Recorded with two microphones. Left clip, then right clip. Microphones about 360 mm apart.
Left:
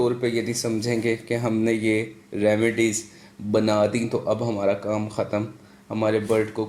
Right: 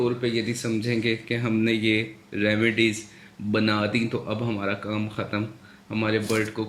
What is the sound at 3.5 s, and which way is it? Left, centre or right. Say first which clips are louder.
A man's voice: left 4 dB; centre.